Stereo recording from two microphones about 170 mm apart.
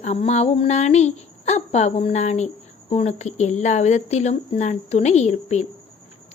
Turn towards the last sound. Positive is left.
turn(degrees=40)  # may be behind; listen again after turning